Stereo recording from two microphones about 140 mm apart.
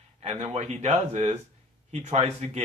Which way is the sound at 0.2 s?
50° right (ahead or behind).